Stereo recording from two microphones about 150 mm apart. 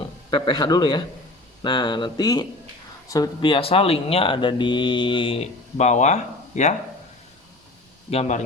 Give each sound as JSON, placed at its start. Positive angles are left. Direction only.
{"t": 0.3, "sound": "speech", "side_deg": 30}
{"t": 8.1, "sound": "a man's voice", "side_deg": 45}